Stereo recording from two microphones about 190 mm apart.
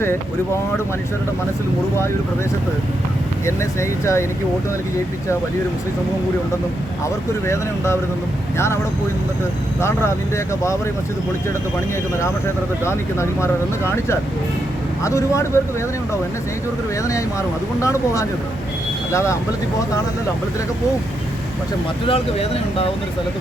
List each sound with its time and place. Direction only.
3.4 s speech: 15° left (ahead or behind)
7.0 s speech: 15° left (ahead or behind)
9.8 s speech: 15° left (ahead or behind)
12.8 s speech: 15° left (ahead or behind)
17.0 s speech: 15° left (ahead or behind)
22.0 s speech: 30° left (ahead or behind)